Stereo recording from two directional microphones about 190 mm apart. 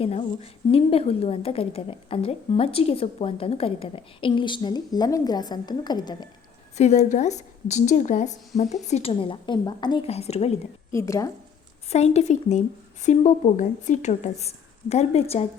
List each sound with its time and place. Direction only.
0.0 s a woman's voice: 30° left (ahead or behind)
6.7 s a woman's voice: 35° left (ahead or behind)
10.9 s speech: 15° left (ahead or behind)
11.9 s a woman's voice: 35° left (ahead or behind)